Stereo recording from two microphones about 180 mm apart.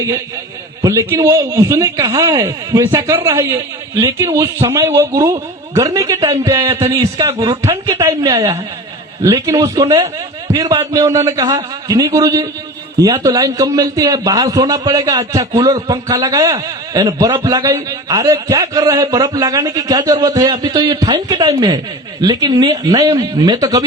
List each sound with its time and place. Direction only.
0.8 s a man's voice: 20° right (ahead or behind)